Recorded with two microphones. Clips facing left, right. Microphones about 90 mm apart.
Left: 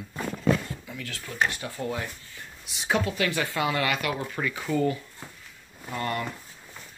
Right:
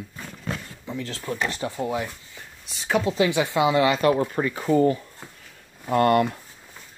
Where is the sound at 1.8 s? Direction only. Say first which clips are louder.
Right 4 dB; 20° right (ahead or behind).